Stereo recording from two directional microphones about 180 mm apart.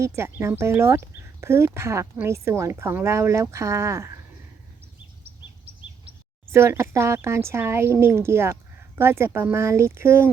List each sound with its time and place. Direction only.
0.0 s speech: 15° right (ahead or behind)
6.5 s speech: 15° right (ahead or behind)